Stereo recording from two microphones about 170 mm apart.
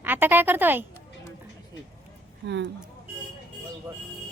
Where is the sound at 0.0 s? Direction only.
10° right (ahead or behind).